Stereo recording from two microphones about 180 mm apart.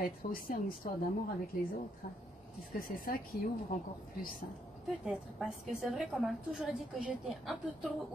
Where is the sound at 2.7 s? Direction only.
50° left (ahead or behind).